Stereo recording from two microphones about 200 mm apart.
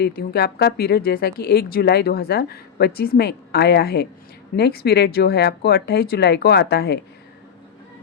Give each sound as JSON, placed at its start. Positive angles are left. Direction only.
{"t": 0.0, "sound": "speech", "side_deg": 50}